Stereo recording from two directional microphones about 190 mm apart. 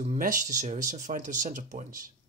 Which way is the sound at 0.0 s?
40° right (ahead or behind).